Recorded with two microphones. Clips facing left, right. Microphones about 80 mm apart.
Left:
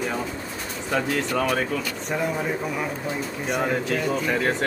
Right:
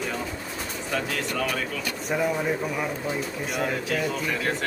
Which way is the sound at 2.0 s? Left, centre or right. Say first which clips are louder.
Right 2 dB; centre.